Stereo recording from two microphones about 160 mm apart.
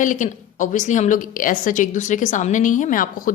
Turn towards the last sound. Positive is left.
turn(degrees=60)  # may be behind; listen again after turning